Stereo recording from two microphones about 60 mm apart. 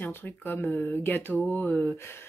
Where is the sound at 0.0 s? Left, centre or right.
Left.